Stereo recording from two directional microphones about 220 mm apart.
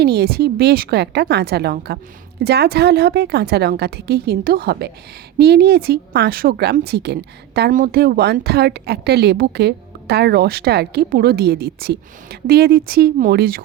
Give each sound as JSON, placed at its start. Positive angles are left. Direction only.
{"t": 0.0, "sound": "speech", "side_deg": -45}